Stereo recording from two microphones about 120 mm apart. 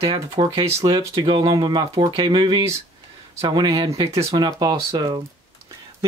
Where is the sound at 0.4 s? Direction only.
55° right (ahead or behind).